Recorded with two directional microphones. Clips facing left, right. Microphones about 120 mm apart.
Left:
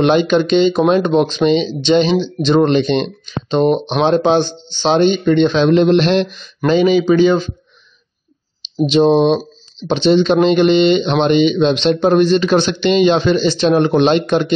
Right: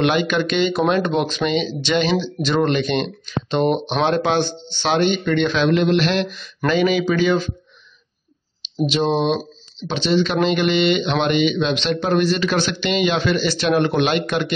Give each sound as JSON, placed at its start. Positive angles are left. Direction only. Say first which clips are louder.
{"t": 0.0, "sound": "speech", "louder": "left 6 dB", "side_deg": 25}
{"t": 8.8, "sound": "speech", "louder": "left 7 dB", "side_deg": 30}